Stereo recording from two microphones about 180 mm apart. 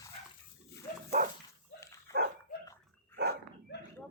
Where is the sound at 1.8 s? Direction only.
15° left (ahead or behind).